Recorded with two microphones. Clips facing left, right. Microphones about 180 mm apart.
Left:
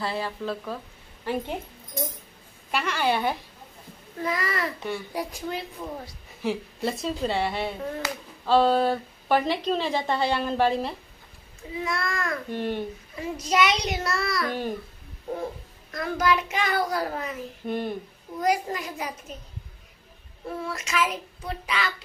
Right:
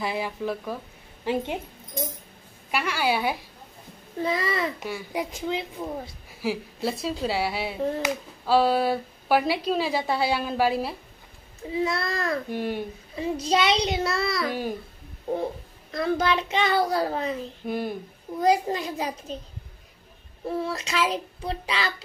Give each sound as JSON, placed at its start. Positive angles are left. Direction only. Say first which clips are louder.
{"t": 0.0, "sound": "speech", "louder": "right 1 dB", "side_deg": -15}
{"t": 2.7, "sound": "a woman's voice", "louder": "even", "side_deg": -5}
{"t": 4.2, "sound": "a child's voice", "louder": "right 2 dB", "side_deg": -25}
{"t": 6.4, "sound": "speech", "louder": "even", "side_deg": -5}
{"t": 11.8, "sound": "a child's voice", "louder": "right 2 dB", "side_deg": -30}
{"t": 12.4, "sound": "speech", "louder": "even", "side_deg": -10}
{"t": 13.1, "sound": "a child's voice", "louder": "right 3 dB", "side_deg": -25}
{"t": 15.9, "sound": "a child's voice", "louder": "right 1 dB", "side_deg": -30}
{"t": 17.6, "sound": "speech", "louder": "even", "side_deg": -5}
{"t": 18.4, "sound": "a child's voice", "louder": "right 3 dB", "side_deg": -30}
{"t": 20.6, "sound": "a child's voice", "louder": "left 1 dB", "side_deg": -30}